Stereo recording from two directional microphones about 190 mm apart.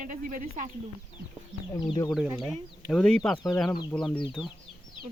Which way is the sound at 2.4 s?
Centre (ahead or behind).